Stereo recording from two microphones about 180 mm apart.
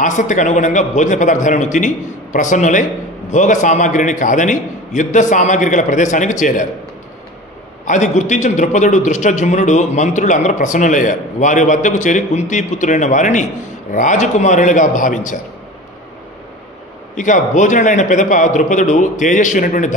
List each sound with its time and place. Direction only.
0.0 s a man's voice: 45° left (ahead or behind)
7.8 s a man's voice: 40° left (ahead or behind)
17.2 s a man's voice: 45° left (ahead or behind)